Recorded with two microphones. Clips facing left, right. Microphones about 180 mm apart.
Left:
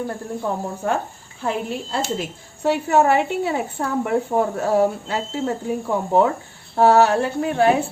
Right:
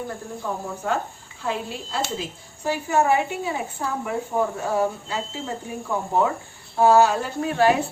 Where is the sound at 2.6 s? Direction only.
65° left (ahead or behind).